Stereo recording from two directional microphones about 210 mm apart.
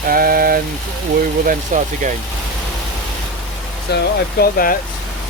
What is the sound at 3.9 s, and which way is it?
Speech, 50° left (ahead or behind).